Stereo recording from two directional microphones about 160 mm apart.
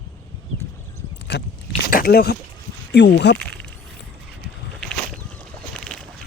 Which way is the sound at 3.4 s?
5° left (ahead or behind).